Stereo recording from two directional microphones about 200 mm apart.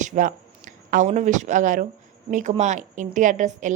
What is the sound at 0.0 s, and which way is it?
A woman's voice, 40° right (ahead or behind).